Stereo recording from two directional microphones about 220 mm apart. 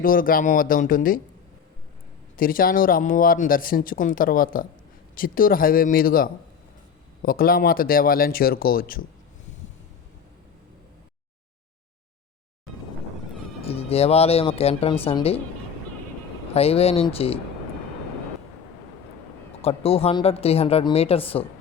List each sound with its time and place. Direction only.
0.0 s speech: 40° left (ahead or behind)
2.3 s speech: 40° left (ahead or behind)
13.7 s speech: 25° left (ahead or behind)
16.6 s speech: 25° left (ahead or behind)
19.6 s speech: 25° left (ahead or behind)